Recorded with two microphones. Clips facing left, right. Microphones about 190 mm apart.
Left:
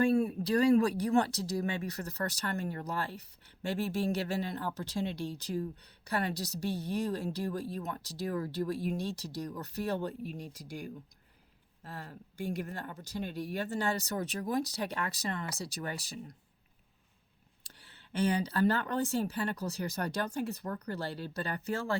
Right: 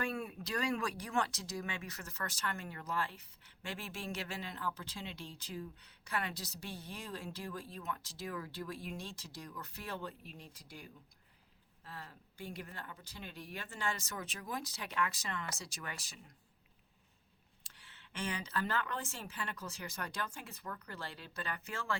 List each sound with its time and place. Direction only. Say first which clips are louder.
0.0 s speech: left 12 dB; 30° left (ahead or behind)
17.6 s speech: left 4 dB; 35° left (ahead or behind)